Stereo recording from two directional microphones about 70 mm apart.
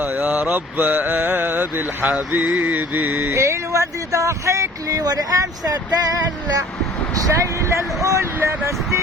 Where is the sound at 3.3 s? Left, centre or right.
Right.